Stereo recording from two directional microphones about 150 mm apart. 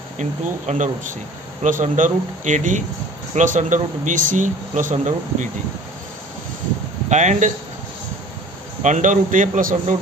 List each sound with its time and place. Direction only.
0.2 s speech: 55° right (ahead or behind)
7.1 s speech: 50° right (ahead or behind)
8.8 s speech: 55° right (ahead or behind)